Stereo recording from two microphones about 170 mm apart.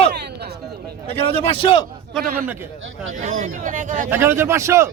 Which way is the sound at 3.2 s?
50° right (ahead or behind).